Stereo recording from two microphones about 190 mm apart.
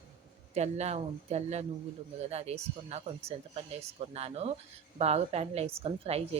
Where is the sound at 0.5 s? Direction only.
35° right (ahead or behind).